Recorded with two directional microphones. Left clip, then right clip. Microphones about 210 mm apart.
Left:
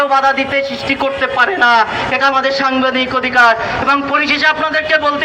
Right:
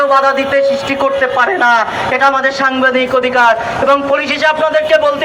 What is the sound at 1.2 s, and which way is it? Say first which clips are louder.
Speech: left 1 dB; 45° right (ahead or behind).